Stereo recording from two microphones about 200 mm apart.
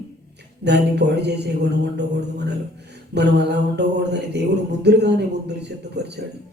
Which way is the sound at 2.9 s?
55° right (ahead or behind).